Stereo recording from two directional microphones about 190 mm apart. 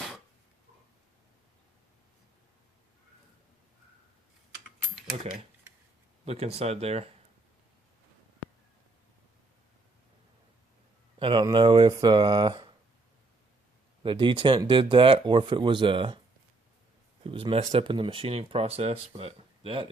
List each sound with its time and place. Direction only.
5.7 s a sound: 15° right (ahead or behind)
6.2 s speech: 35° right (ahead or behind)
11.2 s speech: 25° right (ahead or behind)
14.0 s speech: 25° right (ahead or behind)
17.2 s speech: 30° right (ahead or behind)